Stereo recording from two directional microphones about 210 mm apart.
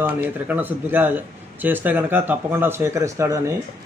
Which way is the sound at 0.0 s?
10° right (ahead or behind).